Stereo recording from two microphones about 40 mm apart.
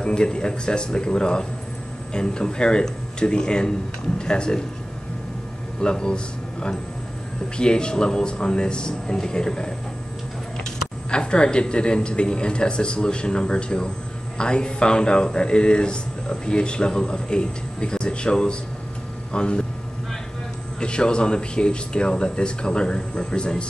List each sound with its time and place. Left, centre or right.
0.0 s speech: left
5.8 s a man's voice: left
20.8 s speech: left